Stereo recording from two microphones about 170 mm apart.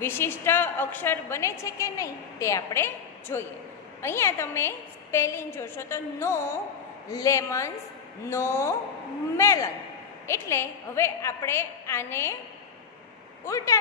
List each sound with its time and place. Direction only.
0.0 s a woman's voice: 15° left (ahead or behind)
13.5 s speech: 20° left (ahead or behind)